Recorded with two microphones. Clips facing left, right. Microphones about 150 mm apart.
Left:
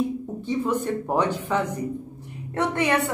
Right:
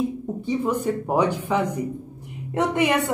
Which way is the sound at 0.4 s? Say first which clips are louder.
Right 1 dB; 10° right (ahead or behind).